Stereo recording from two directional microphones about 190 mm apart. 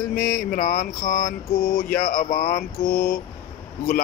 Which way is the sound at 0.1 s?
45° left (ahead or behind).